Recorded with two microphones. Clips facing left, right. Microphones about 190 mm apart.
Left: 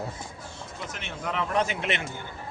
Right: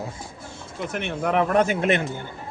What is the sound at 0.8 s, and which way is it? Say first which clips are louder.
Speech: right 10 dB; 55° right (ahead or behind).